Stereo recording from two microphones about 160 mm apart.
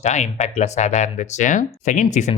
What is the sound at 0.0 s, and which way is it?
Speech, 45° left (ahead or behind).